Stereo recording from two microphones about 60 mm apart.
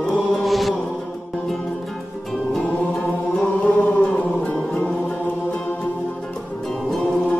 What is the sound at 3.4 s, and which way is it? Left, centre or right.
Music, left.